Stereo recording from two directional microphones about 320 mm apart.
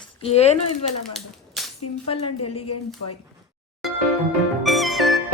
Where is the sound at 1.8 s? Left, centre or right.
Left.